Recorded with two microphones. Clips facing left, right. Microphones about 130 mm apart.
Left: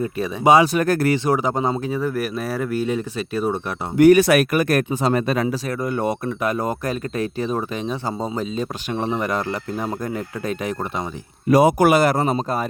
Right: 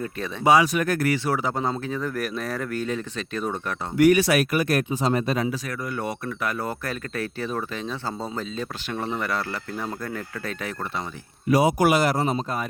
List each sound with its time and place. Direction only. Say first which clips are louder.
0.0 s speech: left 5 dB; 15° left (ahead or behind)
0.5 s speech: left 4 dB; 30° left (ahead or behind); by 3.8 s 10° left (ahead or behind)
4.1 s speech: left 6 dB; 55° left (ahead or behind)
5.6 s speech: left 7 dB; 25° left (ahead or behind)
11.4 s speech: left 5 dB; 50° left (ahead or behind)